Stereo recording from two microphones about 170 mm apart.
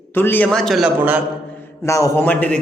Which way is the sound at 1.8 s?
15° left (ahead or behind).